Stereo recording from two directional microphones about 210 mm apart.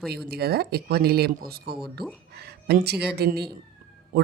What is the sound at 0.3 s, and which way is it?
Speech, 50° right (ahead or behind).